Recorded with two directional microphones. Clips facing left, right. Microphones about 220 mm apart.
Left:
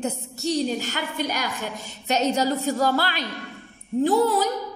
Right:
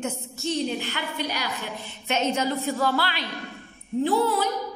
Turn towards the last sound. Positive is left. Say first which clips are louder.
# left 3 dB
turn(degrees=40)  # may be behind; listen again after turning